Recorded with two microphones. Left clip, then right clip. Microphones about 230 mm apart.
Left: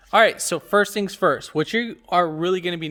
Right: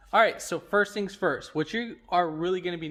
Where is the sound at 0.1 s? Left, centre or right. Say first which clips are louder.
Left 6 dB; left.